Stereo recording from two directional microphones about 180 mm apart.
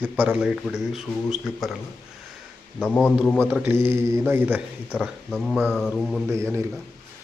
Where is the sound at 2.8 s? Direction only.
10° left (ahead or behind).